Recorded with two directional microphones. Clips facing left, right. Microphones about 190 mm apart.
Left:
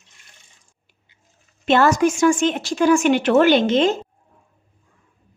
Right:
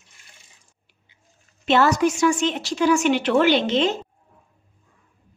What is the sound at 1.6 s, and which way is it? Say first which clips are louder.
A woman's voice: left 2 dB; 50° left (ahead or behind).